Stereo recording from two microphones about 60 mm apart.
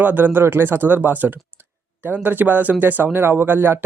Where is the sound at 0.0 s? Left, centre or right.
Right.